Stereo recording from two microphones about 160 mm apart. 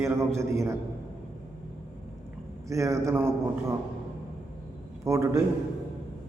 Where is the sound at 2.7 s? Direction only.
20° right (ahead or behind).